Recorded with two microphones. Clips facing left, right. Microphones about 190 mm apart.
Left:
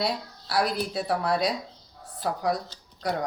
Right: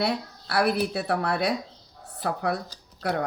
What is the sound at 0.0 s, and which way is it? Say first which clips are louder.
Speech: right 2 dB; 60° right (ahead or behind).